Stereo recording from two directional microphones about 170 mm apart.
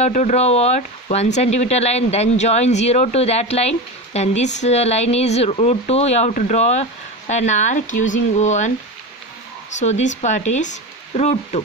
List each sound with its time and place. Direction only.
0.0 s speech: 45° left (ahead or behind)
9.8 s speech: 45° left (ahead or behind)